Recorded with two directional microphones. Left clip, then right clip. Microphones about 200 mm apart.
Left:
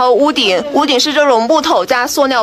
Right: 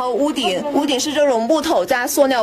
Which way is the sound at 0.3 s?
5° left (ahead or behind).